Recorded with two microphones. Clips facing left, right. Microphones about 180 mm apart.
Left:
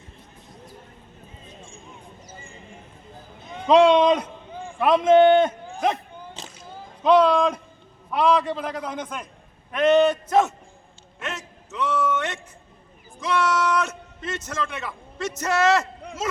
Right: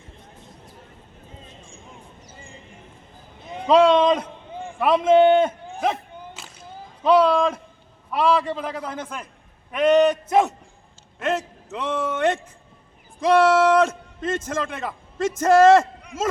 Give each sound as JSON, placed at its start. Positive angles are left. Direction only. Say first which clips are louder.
{"t": 3.7, "sound": "a man's voice", "louder": "even", "side_deg": 0}
{"t": 7.0, "sound": "a man's voice", "louder": "even", "side_deg": -5}
{"t": 11.3, "sound": "a sound", "louder": "even", "side_deg": -55}
{"t": 13.3, "sound": "speech", "louder": "right 7 dB", "side_deg": -30}
{"t": 13.7, "sound": "a man's voice", "louder": "right 7 dB", "side_deg": -50}